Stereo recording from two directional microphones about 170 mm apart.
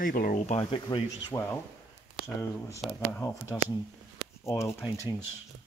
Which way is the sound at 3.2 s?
25° left (ahead or behind).